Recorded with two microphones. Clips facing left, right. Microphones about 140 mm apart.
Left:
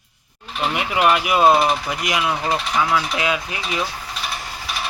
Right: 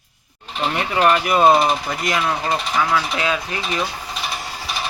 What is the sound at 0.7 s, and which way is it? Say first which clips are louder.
Speech: right 1 dB; 10° left (ahead or behind).